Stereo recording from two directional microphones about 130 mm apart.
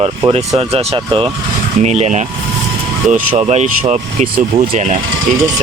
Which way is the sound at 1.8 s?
60° right (ahead or behind).